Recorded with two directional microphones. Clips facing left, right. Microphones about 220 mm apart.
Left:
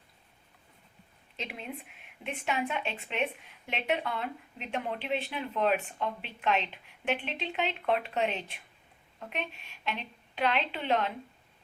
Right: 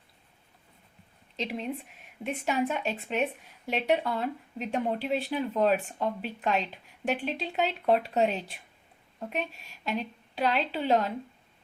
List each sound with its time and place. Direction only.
1.4 s a woman's voice: 35° right (ahead or behind)